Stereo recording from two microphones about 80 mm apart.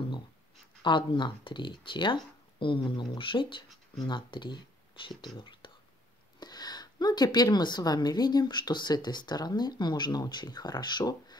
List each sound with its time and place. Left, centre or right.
0.8 s speech: left
6.4 s a woman's voice: left